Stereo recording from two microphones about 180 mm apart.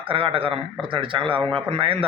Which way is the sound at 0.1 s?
30° right (ahead or behind).